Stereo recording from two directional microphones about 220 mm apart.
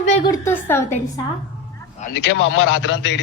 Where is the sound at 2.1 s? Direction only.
55° left (ahead or behind).